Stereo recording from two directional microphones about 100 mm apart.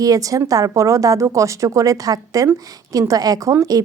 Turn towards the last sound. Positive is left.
turn(degrees=-35)  # may be behind; listen again after turning